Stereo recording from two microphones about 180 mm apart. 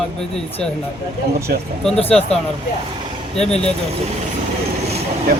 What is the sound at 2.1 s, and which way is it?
Speech, 5° left (ahead or behind).